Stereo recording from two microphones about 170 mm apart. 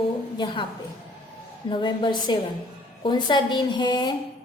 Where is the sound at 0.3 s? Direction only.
30° left (ahead or behind).